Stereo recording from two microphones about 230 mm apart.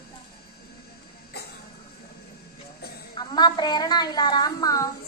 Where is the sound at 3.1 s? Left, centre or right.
Centre.